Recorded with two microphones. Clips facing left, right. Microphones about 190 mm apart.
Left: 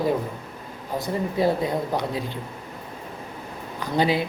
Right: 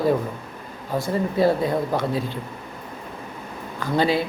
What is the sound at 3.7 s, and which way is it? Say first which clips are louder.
Speech: right 1 dB; 15° left (ahead or behind).